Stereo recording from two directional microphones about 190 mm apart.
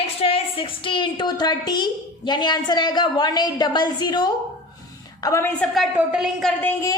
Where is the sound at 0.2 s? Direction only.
30° left (ahead or behind); by 5.6 s 15° left (ahead or behind).